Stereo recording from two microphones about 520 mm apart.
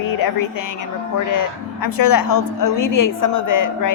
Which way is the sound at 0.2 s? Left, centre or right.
Left.